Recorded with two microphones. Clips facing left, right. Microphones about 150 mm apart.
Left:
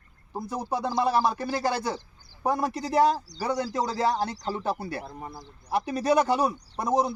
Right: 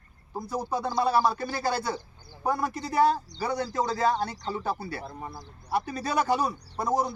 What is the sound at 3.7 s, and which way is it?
Speech, 10° left (ahead or behind).